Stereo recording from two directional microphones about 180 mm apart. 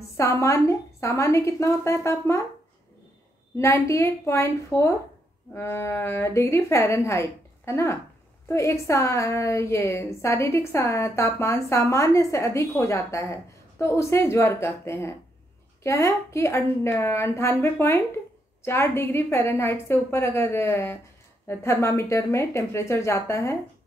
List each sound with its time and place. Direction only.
0.2 s a woman's voice: 15° left (ahead or behind)
3.5 s a woman's voice: 15° left (ahead or behind)